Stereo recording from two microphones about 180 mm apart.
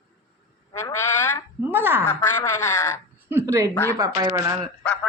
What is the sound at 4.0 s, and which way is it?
Speech, 20° right (ahead or behind).